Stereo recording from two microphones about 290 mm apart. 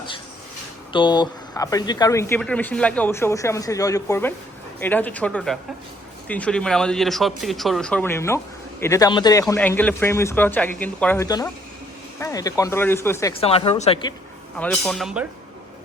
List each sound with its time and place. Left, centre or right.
0.9 s speech: centre
13.4 s speech: centre
14.6 s speech: centre